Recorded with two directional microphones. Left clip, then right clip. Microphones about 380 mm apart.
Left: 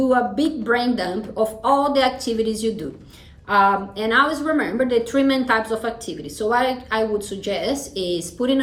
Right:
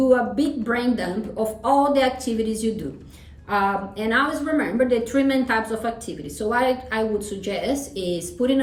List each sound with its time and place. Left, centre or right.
0.1 s a woman's voice: centre